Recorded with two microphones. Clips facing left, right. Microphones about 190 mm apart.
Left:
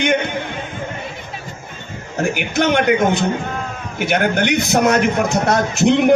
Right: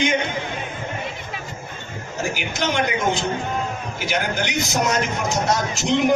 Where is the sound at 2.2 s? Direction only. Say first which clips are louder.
Left 7 dB; 60° left (ahead or behind).